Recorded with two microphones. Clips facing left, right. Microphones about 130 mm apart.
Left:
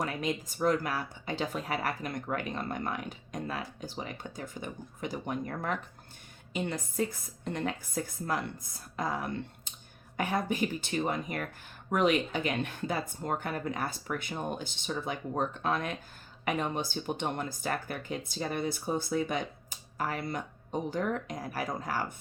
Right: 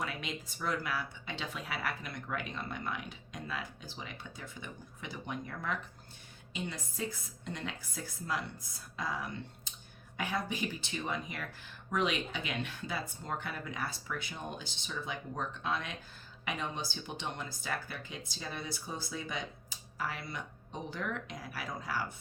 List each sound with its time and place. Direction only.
0.0 s speech: 45° left (ahead or behind)